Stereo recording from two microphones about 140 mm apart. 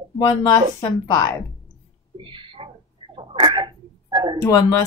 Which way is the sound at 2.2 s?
35° right (ahead or behind).